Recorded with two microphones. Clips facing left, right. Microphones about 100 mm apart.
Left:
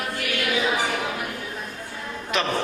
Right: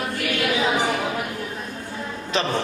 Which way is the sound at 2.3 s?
30° right (ahead or behind).